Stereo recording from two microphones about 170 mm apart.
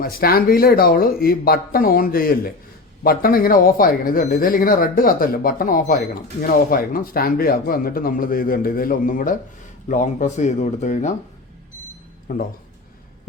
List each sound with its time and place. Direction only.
0.0 s speech: 60° left (ahead or behind); by 11.1 s 45° left (ahead or behind)
12.3 s speech: 50° left (ahead or behind)